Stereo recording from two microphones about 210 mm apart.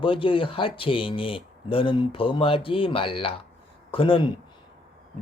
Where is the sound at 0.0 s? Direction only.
25° left (ahead or behind).